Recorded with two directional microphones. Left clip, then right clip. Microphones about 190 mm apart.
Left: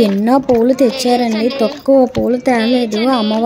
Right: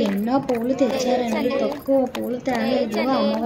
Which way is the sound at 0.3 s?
40° left (ahead or behind).